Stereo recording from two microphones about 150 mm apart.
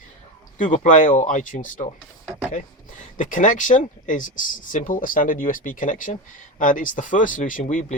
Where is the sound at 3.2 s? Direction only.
60° left (ahead or behind).